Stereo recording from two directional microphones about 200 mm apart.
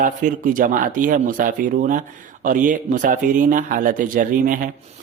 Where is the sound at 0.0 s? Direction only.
40° right (ahead or behind).